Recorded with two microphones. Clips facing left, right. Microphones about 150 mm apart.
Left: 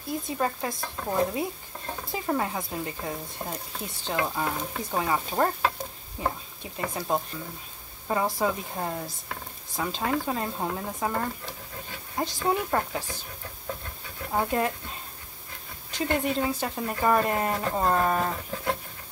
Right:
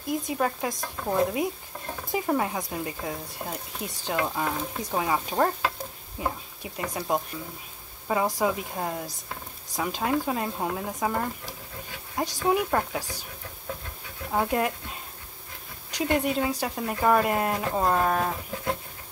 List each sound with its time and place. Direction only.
0.0 s speech: 15° right (ahead or behind)
2.2 s speech: 5° right (ahead or behind)
4.4 s stir: 5° right (ahead or behind)
6.1 s speech: 10° right (ahead or behind)
14.3 s speech: 5° right (ahead or behind)
15.9 s speech: 10° right (ahead or behind)